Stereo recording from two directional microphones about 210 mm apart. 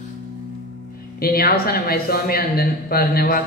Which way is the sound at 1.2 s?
45° left (ahead or behind).